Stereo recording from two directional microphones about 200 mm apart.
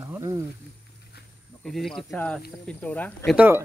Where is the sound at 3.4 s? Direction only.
10° right (ahead or behind).